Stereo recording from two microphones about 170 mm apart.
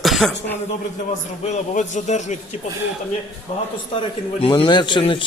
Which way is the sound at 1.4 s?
45° left (ahead or behind).